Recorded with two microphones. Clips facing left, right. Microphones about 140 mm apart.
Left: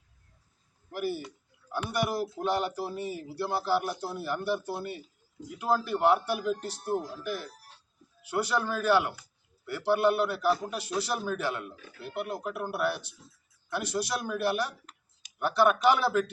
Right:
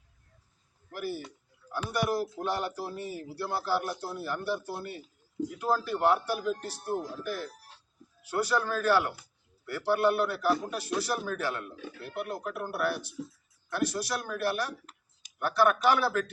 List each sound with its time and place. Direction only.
0.9 s a man's voice: 15° left (ahead or behind)